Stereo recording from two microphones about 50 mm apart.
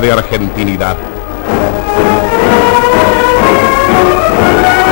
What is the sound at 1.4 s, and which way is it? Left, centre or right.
Music, centre.